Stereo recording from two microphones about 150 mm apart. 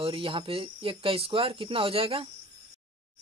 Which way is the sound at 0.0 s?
35° right (ahead or behind).